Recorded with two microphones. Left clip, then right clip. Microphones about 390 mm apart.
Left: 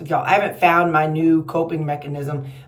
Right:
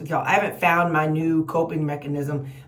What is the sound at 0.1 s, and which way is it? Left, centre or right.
Speech, centre.